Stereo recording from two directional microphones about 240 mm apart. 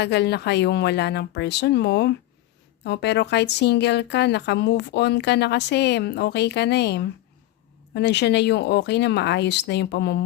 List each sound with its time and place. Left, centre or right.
0.0 s a woman's voice: left